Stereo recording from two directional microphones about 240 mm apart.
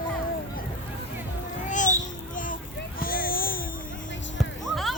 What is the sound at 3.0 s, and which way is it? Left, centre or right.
Baby cry, left.